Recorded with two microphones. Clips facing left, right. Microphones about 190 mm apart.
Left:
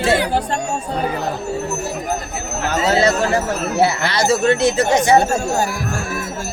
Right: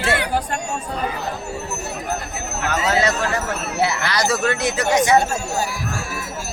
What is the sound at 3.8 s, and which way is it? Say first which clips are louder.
Speech: left 3 dB; 30° left (ahead or behind).